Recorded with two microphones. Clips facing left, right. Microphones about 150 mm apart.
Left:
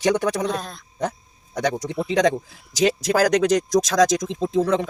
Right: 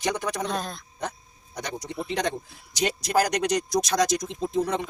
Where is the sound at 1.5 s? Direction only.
90° left.